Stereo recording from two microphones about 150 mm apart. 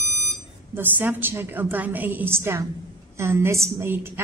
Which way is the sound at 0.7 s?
15° right (ahead or behind).